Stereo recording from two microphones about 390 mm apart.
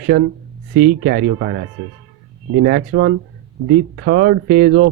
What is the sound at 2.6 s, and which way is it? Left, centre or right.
Speech, right.